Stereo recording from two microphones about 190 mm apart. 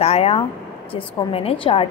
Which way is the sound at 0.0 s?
30° left (ahead or behind).